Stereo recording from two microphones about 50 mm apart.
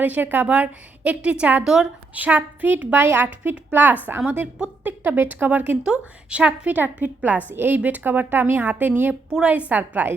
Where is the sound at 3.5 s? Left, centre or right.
Right.